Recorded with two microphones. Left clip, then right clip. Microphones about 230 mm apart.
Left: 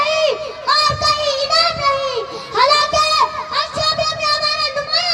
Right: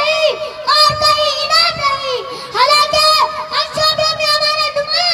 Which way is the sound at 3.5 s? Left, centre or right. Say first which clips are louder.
Right 3 dB; right.